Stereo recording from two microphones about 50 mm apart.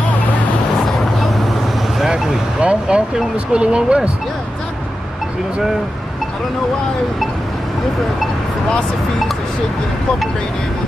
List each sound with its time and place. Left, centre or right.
0.8 s vehicle: centre
2.6 s speech: right